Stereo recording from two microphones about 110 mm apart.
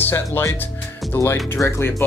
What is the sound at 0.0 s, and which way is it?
Speech, 20° left (ahead or behind).